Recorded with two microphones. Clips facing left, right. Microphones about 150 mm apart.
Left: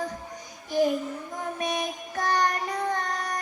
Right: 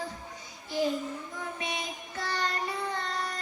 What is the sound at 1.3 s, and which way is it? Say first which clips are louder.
Music: left 6 dB; 45° left (ahead or behind).